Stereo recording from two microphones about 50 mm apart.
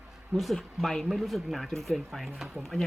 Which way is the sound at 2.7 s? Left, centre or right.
Centre.